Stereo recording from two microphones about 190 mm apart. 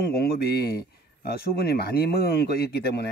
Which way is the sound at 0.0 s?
55° left (ahead or behind).